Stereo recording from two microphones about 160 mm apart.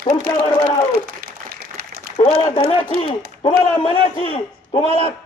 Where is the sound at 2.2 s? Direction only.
20° left (ahead or behind).